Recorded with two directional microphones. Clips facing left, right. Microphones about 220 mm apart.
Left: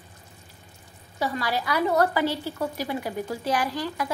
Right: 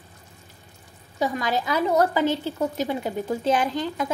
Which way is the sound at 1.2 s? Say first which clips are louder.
Right 3 dB; 15° right (ahead or behind).